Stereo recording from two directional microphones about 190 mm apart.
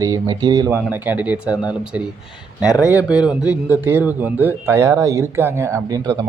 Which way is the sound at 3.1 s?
5° right (ahead or behind).